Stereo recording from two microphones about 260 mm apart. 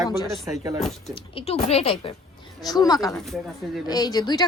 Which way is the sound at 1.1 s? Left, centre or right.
Left.